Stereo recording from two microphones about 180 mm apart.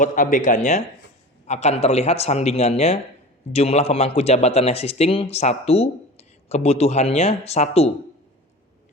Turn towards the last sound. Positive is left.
turn(degrees=35)  # may be behind; listen again after turning